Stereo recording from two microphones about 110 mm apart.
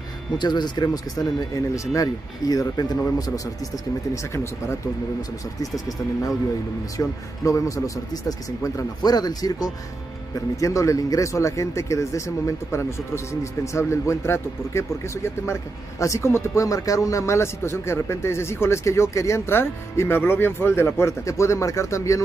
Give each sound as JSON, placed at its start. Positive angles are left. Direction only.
{"t": 0.4, "sound": "speech", "side_deg": 40}